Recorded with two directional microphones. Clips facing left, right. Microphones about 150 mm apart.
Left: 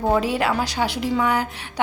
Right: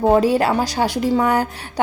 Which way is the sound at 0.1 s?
40° right (ahead or behind).